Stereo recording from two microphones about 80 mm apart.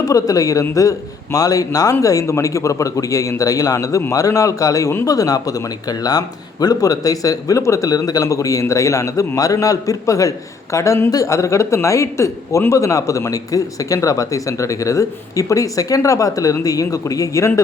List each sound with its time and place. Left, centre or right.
0.0 s speech: left